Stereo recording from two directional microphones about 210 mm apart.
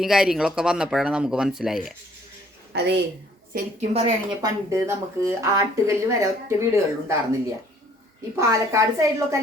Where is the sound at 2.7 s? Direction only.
50° right (ahead or behind).